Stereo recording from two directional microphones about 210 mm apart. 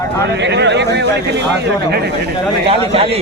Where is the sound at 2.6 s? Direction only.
25° right (ahead or behind).